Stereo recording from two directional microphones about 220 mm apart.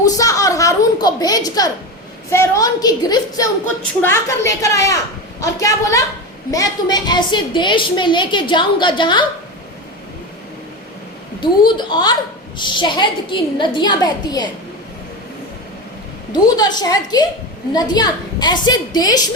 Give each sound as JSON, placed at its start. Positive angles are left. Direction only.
{"t": 0.0, "sound": "a sound", "side_deg": 15}
{"t": 2.3, "sound": "a woman's voice", "side_deg": 15}
{"t": 11.6, "sound": "a woman's voice", "side_deg": 20}
{"t": 16.3, "sound": "a woman's voice", "side_deg": 20}